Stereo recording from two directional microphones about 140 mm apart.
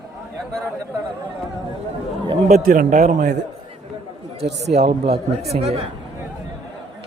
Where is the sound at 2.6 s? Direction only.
80° right; by 3.3 s 60° right (ahead or behind).